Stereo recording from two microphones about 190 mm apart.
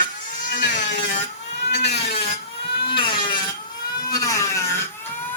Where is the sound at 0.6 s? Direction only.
40° left (ahead or behind).